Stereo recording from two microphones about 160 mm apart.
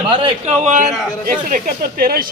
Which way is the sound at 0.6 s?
50° right (ahead or behind).